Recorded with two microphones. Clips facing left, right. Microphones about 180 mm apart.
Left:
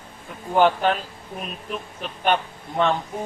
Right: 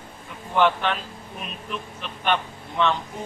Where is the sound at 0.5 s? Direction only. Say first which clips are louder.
Left 3 dB; 40° left (ahead or behind).